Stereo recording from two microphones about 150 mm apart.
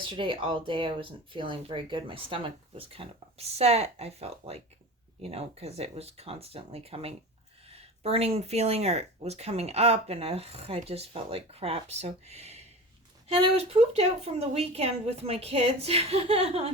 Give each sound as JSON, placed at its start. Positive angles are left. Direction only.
{"t": 0.0, "sound": "speech", "side_deg": -35}